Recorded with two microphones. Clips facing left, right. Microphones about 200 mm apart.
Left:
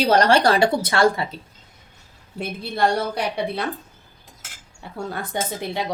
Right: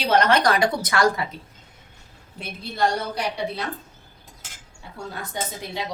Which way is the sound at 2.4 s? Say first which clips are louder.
Left 3 dB; 55° left (ahead or behind).